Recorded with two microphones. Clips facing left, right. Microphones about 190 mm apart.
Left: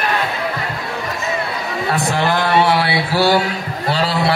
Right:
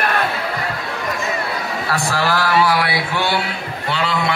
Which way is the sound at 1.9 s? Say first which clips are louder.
Left 2 dB; 20° left (ahead or behind).